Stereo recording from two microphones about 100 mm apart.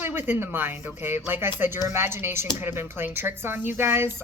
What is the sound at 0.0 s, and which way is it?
Speech, 20° right (ahead or behind).